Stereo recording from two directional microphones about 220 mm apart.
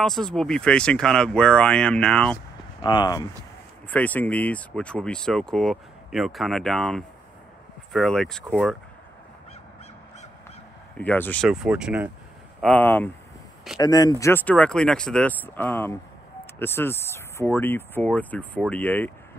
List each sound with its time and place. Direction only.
0.0 s speech: centre (ahead or behind)
2.8 s speech: 20° left (ahead or behind)
3.9 s speech: 5° left (ahead or behind)
11.0 s speech: 10° left (ahead or behind)
12.6 s speech: 5° left (ahead or behind)